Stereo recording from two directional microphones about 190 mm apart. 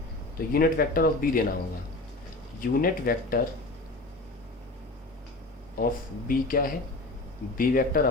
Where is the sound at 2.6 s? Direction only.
50° left (ahead or behind).